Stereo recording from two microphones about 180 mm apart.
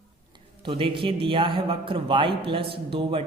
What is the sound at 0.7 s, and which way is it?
A man's voice, 30° right (ahead or behind).